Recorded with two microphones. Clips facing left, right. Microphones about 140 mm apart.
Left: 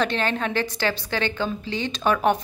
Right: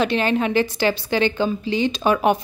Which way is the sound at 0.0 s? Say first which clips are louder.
Right 4 dB; 10° right (ahead or behind).